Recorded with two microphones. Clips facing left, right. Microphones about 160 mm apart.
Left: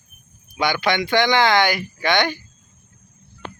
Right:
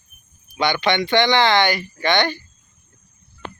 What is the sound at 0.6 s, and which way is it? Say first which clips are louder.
A man's voice: right 1 dB; 10° left (ahead or behind).